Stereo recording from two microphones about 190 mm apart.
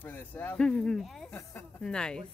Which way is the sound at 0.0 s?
10° left (ahead or behind).